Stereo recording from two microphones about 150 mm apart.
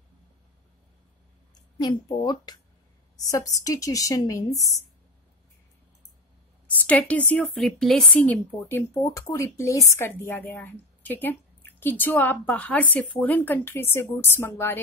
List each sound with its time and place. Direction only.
1.5 s a woman's voice: 25° left (ahead or behind)
6.9 s speech: 10° left (ahead or behind)